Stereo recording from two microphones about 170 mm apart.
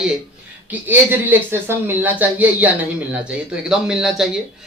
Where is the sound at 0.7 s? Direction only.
10° right (ahead or behind).